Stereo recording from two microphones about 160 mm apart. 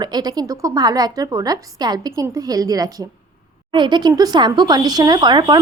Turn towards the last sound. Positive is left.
turn(degrees=-25)  # may be behind; listen again after turning